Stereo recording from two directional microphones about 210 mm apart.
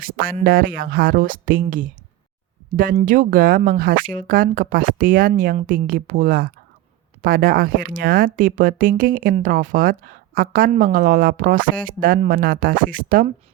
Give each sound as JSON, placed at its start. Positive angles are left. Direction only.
{"t": 0.0, "sound": "speech", "side_deg": -45}
{"t": 3.0, "sound": "speech", "side_deg": -40}